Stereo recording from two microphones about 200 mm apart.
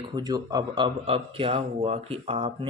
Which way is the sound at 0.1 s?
20° right (ahead or behind).